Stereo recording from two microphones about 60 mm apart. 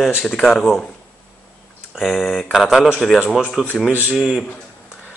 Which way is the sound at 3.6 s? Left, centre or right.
Centre.